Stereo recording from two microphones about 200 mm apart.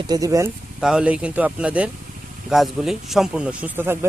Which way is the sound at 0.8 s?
5° right (ahead or behind).